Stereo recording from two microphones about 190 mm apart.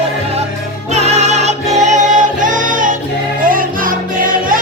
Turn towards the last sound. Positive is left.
turn(degrees=-45)  # may be behind; listen again after turning